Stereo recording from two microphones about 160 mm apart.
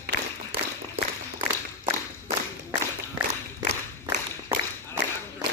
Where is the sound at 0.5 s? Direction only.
75° right (ahead or behind).